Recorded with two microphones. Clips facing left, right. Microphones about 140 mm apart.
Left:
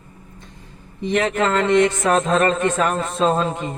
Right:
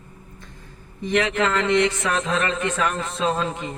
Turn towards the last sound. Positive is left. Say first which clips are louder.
# left 4 dB
turn(degrees=50)  # may be behind; listen again after turning